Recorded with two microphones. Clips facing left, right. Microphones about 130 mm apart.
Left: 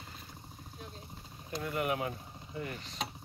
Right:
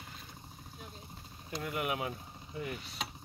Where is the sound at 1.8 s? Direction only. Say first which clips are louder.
Left 2 dB; 10° right (ahead or behind).